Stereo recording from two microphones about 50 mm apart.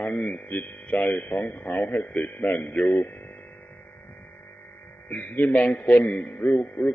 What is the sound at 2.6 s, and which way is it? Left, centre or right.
Speech, left.